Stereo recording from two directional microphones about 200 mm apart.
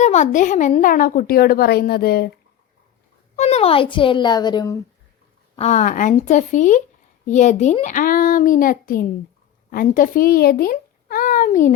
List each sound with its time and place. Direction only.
0.0 s a woman's voice: 35° left (ahead or behind); by 2.3 s 50° left (ahead or behind)
3.3 s a child's voice: 30° left (ahead or behind)
5.5 s a child's voice: 35° left (ahead or behind)